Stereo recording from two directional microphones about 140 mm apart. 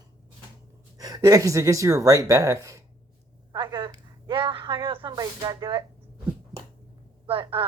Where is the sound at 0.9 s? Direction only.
25° right (ahead or behind).